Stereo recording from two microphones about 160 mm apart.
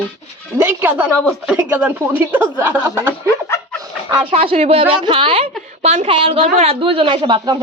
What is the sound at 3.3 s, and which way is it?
Chicken, 15° left (ahead or behind).